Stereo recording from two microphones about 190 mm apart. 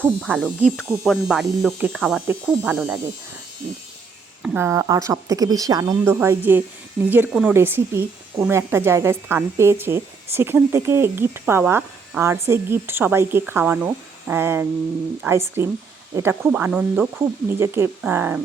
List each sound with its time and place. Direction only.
0.0 s speech: 5° right (ahead or behind)
4.4 s speech: 10° right (ahead or behind)